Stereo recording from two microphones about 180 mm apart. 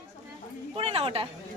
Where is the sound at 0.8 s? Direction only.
35° right (ahead or behind).